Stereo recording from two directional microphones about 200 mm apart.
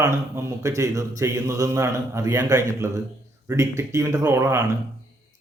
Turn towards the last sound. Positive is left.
turn(degrees=-15)  # may be behind; listen again after turning